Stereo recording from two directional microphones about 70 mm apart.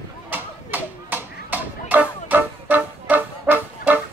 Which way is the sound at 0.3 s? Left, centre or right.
Right.